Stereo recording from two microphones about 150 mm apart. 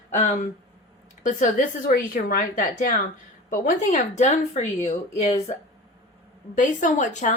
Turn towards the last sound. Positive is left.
turn(degrees=55)  # may be behind; listen again after turning